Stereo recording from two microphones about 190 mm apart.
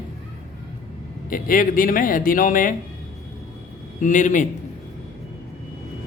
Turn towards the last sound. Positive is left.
turn(degrees=40)  # may be behind; listen again after turning